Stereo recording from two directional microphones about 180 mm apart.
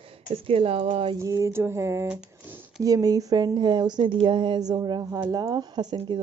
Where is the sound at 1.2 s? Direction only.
15° right (ahead or behind).